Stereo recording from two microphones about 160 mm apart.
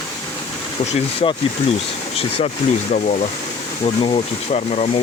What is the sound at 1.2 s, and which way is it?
Speech, 40° left (ahead or behind).